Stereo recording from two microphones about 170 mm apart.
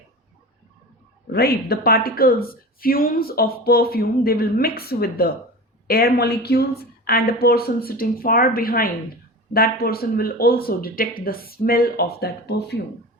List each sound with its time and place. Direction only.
1.3 s speech: 65° left (ahead or behind)